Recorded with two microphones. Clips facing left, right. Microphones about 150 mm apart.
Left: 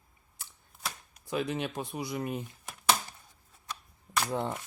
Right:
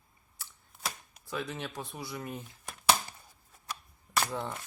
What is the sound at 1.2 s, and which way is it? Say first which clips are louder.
Speech: left 5 dB; 15° left (ahead or behind).